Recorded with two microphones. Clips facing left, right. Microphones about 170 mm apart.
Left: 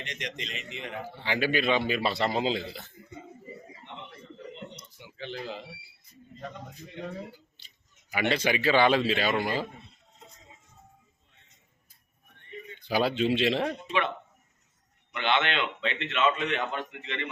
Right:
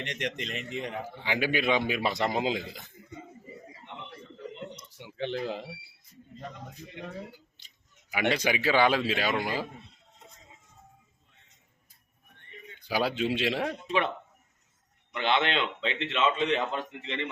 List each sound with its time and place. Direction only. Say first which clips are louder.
0.0 s a man's voice: right 4 dB; 60° right (ahead or behind)
1.2 s a man's voice: left 1 dB; 15° right (ahead or behind)
4.8 s a sound: right 7 dB; 65° right (ahead or behind)
8.1 s a man's voice: even; 10° right (ahead or behind)
12.9 s a man's voice: left 2 dB; 10° right (ahead or behind)
15.1 s a man's voice: right 1 dB; 35° right (ahead or behind)